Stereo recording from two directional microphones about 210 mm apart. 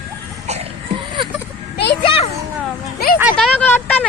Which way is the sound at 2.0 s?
25° left (ahead or behind).